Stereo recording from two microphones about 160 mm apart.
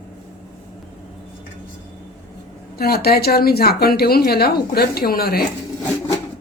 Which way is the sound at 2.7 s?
75° left (ahead or behind).